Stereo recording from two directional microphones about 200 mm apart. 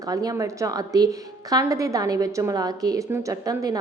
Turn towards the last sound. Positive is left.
turn(degrees=-15)  # may be behind; listen again after turning